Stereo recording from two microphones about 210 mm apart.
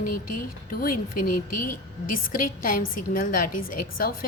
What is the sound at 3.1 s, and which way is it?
Speech, 40° left (ahead or behind).